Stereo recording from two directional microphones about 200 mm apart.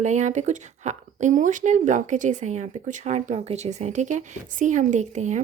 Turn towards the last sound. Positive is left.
turn(degrees=-35)  # may be behind; listen again after turning